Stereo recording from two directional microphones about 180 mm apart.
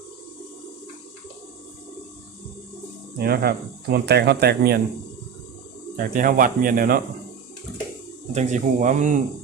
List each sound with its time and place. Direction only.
3.2 s speech: 55° right (ahead or behind)
6.0 s speech: 50° right (ahead or behind)
8.3 s speech: 40° right (ahead or behind)